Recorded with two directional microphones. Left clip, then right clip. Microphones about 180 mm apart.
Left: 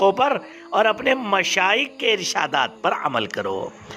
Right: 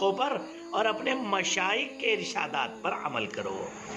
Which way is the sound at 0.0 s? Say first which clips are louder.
Left 10 dB; 40° left (ahead or behind).